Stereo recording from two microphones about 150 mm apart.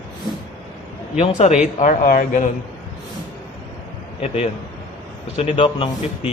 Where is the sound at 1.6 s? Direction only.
55° left (ahead or behind).